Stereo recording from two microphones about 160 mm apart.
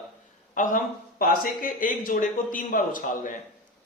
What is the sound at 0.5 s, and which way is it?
A man's voice, 55° left (ahead or behind).